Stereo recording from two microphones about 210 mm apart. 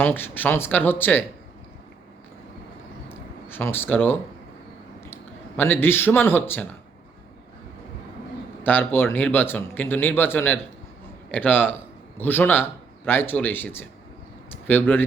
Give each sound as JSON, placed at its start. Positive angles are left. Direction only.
{"t": 0.0, "sound": "a man's voice", "side_deg": 10}
{"t": 3.1, "sound": "a sound", "side_deg": 10}
{"t": 5.5, "sound": "a man's voice", "side_deg": 10}
{"t": 8.6, "sound": "a man's voice", "side_deg": 10}